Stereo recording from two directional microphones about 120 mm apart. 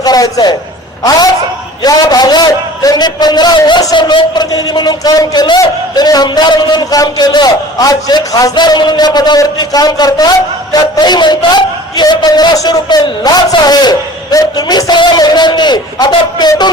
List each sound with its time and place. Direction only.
0.0 s a man's voice: 30° left (ahead or behind)
1.8 s a man's voice: 35° left (ahead or behind)